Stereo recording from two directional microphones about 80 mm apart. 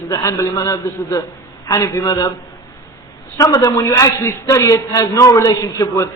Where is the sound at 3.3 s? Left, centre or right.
Left.